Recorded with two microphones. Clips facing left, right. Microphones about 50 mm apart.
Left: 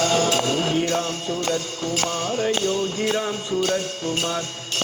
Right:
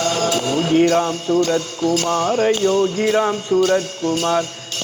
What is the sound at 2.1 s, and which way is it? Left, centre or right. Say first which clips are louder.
Music: right 7 dB; right.